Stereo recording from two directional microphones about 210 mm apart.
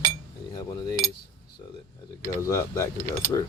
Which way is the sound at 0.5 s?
15° left (ahead or behind).